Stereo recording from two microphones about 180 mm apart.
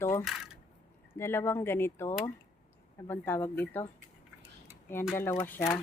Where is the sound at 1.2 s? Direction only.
15° left (ahead or behind).